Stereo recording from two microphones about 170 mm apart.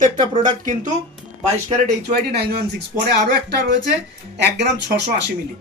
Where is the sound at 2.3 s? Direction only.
70° right (ahead or behind).